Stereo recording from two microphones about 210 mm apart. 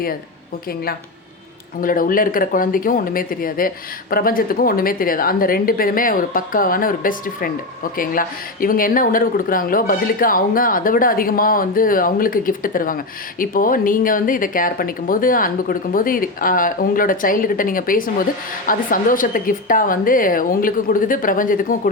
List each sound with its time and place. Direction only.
1.8 s speech: 40° left (ahead or behind)